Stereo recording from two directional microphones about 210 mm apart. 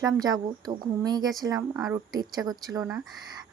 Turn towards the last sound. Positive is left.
turn(degrees=-15)  # may be behind; listen again after turning